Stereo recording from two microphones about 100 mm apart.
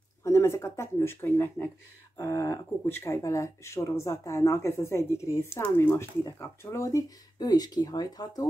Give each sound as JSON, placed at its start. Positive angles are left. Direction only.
{"t": 0.2, "sound": "a woman's voice", "side_deg": 30}